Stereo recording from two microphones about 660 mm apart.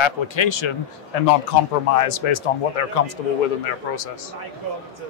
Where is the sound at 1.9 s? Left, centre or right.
Left.